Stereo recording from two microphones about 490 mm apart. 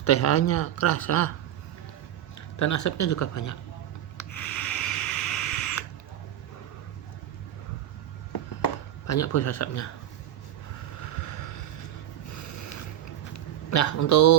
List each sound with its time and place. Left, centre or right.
0.0 s speech: left
2.6 s speech: left
4.2 s a sound: left
9.0 s speech: left
11.0 s vehicle: left
12.3 s snort: left
13.3 s a man's voice: left